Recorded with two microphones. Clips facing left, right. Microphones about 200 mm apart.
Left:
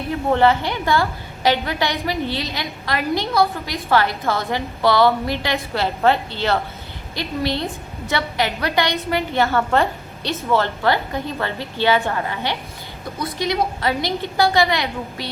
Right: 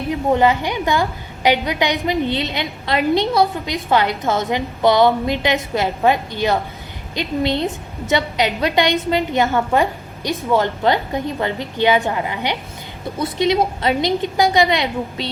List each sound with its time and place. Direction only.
0.1 s a woman's voice: 15° right (ahead or behind)